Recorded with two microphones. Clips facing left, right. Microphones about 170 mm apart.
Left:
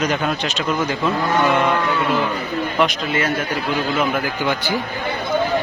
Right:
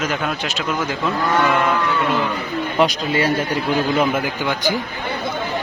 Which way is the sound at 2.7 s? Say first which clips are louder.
Right 3 dB; 35° right (ahead or behind).